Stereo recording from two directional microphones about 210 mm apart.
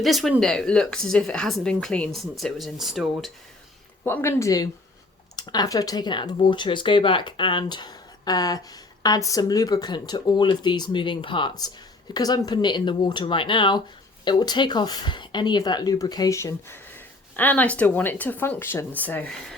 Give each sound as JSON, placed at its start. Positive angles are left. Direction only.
{"t": 0.0, "sound": "speech", "side_deg": 0}
{"t": 4.0, "sound": "speech", "side_deg": 10}